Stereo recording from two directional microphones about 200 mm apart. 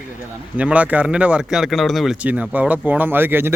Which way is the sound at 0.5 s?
5° right (ahead or behind).